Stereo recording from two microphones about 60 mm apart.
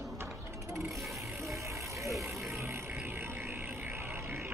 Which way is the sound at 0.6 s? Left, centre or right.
Right.